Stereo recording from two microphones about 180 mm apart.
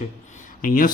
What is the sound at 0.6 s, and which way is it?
Speech, 50° left (ahead or behind).